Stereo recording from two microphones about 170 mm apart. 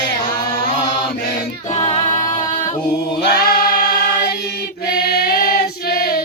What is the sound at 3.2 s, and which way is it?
Choir, 65° left (ahead or behind).